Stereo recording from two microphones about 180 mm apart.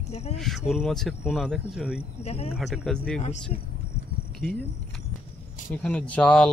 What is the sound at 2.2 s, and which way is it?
Speech, 35° left (ahead or behind).